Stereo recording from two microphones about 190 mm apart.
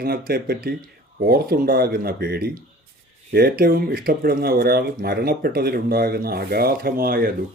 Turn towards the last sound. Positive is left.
turn(degrees=-50)  # may be behind; listen again after turning